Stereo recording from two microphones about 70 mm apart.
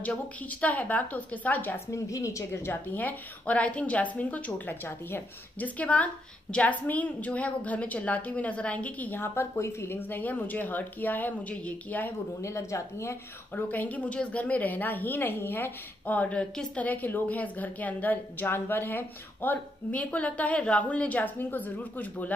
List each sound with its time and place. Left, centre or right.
0.4 s a woman's voice: left
1.9 s a woman's voice: left
2.7 s a woman's voice: left
12.4 s a woman's voice: left
13.7 s a woman's voice: left